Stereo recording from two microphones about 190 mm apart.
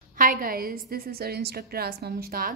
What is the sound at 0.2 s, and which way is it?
A woman's voice, 50° right (ahead or behind).